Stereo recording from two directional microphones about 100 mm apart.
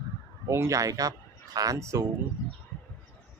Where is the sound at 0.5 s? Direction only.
30° right (ahead or behind).